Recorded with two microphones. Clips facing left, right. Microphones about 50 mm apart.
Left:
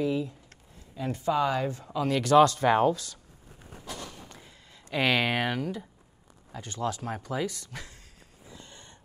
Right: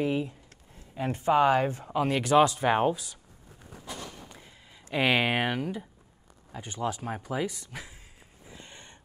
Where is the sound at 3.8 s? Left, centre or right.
Centre.